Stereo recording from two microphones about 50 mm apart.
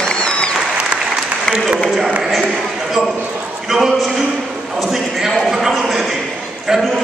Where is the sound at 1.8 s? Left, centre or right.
Centre.